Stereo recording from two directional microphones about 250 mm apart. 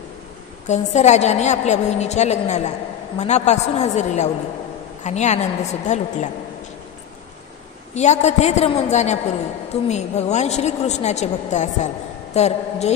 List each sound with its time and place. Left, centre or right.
0.7 s a woman's voice: left
7.9 s a woman's voice: left